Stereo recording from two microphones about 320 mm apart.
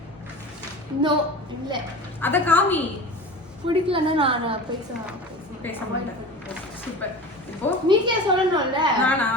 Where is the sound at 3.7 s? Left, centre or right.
Centre.